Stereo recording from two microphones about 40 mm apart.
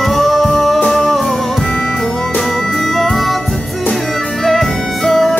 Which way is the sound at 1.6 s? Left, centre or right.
Left.